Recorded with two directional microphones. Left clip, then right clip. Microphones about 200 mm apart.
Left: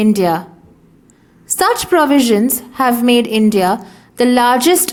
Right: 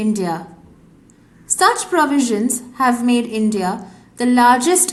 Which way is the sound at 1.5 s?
40° left (ahead or behind).